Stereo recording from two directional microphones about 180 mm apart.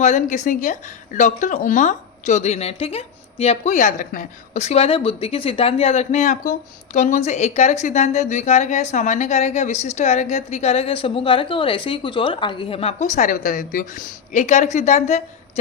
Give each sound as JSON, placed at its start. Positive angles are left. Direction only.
{"t": 0.0, "sound": "a woman's voice", "side_deg": 40}